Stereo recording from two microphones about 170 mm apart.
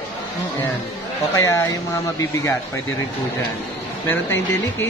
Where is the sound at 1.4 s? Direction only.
15° left (ahead or behind).